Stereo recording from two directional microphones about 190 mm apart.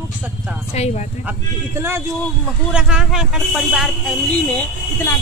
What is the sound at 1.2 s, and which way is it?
Speech, 10° right (ahead or behind).